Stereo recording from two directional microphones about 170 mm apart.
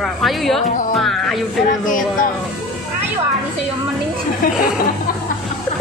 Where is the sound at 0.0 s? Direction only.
Centre (ahead or behind).